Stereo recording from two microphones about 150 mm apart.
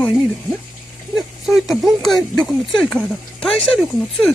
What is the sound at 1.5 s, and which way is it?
Speech, centre (ahead or behind).